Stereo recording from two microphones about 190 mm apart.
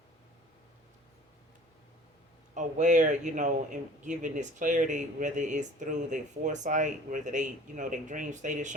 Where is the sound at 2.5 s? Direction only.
40° right (ahead or behind).